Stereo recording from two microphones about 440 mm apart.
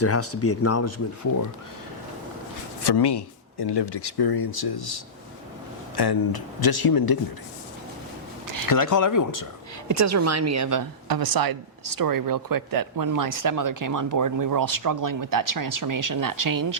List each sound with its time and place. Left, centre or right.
0.0 s speech: left
2.8 s speech: left
6.0 s speech: left
8.7 s speech: left
9.9 s a woman's voice: right